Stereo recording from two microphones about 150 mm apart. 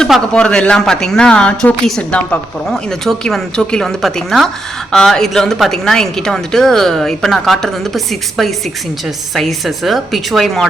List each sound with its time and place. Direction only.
0.0 s speech: 5° left (ahead or behind)